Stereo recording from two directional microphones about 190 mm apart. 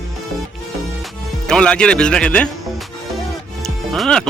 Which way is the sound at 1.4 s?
5° left (ahead or behind).